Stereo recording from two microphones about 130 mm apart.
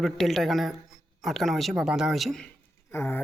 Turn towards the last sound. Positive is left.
turn(degrees=15)  # may be behind; listen again after turning